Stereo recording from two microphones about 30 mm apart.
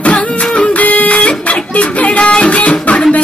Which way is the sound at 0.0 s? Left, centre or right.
Left.